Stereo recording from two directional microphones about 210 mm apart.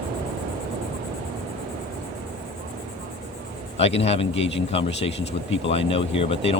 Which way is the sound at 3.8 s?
30° left (ahead or behind).